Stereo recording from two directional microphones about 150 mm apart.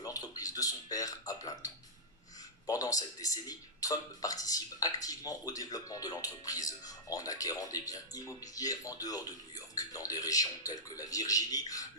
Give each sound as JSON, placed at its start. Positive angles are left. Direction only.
{"t": 0.0, "sound": "speech", "side_deg": 25}